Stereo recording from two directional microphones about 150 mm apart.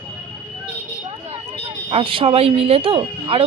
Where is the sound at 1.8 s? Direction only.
40° right (ahead or behind).